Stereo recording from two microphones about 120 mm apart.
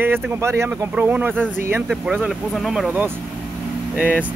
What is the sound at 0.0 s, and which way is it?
Speech, 20° right (ahead or behind).